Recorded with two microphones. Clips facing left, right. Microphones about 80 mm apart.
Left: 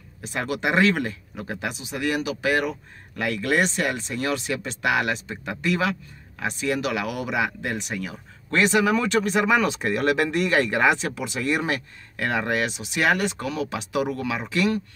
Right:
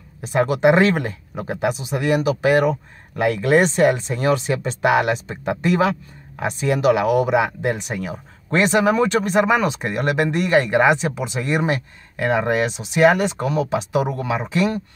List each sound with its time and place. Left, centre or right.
0.3 s speech: right